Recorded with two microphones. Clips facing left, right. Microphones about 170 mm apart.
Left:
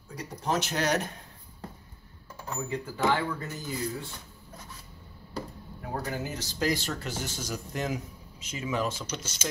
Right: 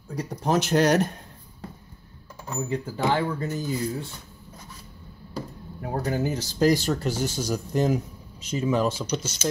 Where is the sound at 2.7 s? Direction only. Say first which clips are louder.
Right 2 dB; 30° right (ahead or behind).